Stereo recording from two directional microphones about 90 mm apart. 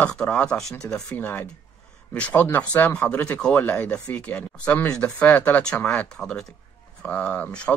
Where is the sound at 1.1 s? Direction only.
20° left (ahead or behind).